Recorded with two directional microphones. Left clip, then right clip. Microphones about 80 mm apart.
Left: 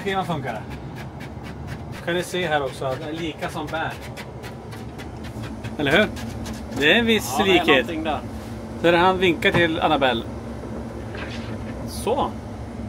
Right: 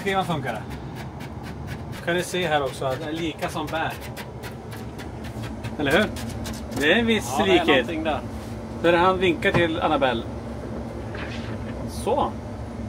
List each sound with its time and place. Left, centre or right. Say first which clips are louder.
2.0 s speech: even; centre
5.8 s speech: left 2 dB; left
7.9 s speech: even; centre
8.8 s a man's voice: left 2 dB; left
12.0 s speech: even; left